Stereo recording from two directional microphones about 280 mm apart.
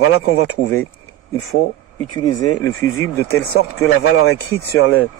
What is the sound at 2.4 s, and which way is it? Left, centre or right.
Speech, left.